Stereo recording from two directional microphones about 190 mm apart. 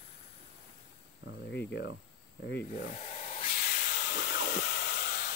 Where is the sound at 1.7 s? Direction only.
65° left (ahead or behind).